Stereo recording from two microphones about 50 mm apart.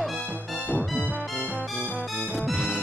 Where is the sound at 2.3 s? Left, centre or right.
Centre.